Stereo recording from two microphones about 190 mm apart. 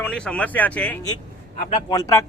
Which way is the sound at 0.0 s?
5° left (ahead or behind).